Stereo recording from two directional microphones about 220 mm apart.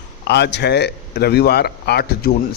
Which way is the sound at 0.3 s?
50° left (ahead or behind).